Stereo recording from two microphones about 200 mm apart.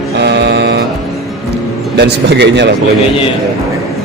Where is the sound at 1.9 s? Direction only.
55° right (ahead or behind).